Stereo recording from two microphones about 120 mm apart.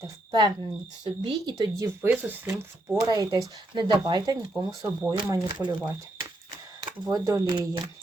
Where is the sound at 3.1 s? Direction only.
35° right (ahead or behind).